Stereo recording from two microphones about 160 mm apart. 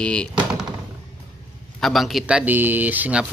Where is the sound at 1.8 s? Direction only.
Centre (ahead or behind).